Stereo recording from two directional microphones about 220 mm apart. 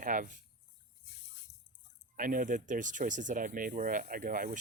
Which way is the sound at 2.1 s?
40° right (ahead or behind).